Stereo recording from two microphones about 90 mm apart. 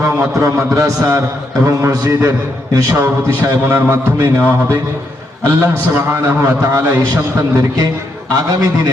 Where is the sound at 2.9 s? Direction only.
25° right (ahead or behind).